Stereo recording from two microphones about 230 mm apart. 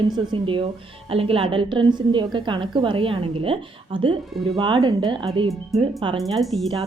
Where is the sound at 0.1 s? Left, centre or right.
Right.